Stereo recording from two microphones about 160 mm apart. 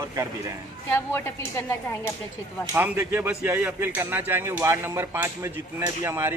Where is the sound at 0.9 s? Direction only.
15° left (ahead or behind).